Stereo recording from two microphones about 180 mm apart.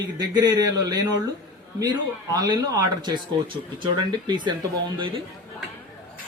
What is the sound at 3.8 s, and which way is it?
Speech, 25° right (ahead or behind).